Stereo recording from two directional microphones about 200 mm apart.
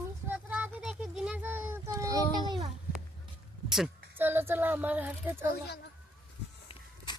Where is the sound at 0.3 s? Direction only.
10° right (ahead or behind).